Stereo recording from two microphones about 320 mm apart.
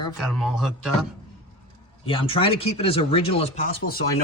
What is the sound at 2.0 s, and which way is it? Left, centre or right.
Speech, centre.